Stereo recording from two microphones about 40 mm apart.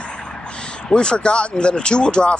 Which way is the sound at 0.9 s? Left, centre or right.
Left.